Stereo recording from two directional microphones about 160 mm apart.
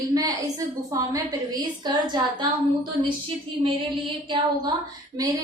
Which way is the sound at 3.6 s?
30° right (ahead or behind).